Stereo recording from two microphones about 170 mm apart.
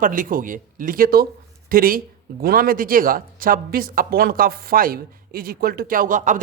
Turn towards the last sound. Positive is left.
turn(degrees=-50)  # may be behind; listen again after turning